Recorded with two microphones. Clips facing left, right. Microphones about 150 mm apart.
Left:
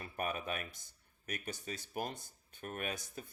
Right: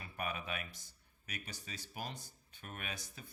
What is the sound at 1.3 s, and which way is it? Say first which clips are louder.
Speech: left 6 dB; 50° left (ahead or behind).